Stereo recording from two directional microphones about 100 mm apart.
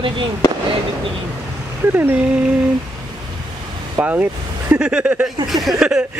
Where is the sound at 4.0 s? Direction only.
15° right (ahead or behind).